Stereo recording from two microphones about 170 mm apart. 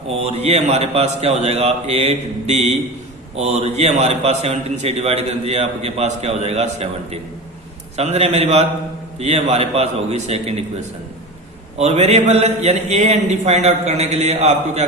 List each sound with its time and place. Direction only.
0.1 s a man's voice: 35° right (ahead or behind)
11.8 s a man's voice: 40° right (ahead or behind)